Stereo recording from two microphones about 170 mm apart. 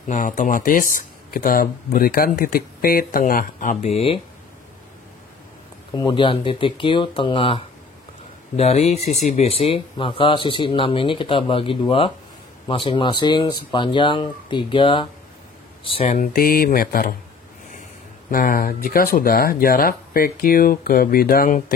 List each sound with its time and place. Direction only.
0.1 s speech: 50° left (ahead or behind)
3.8 s speech: 35° left (ahead or behind)
5.9 s speech: 30° left (ahead or behind)
16.1 s speech: 55° left (ahead or behind)
18.3 s speech: 55° left (ahead or behind)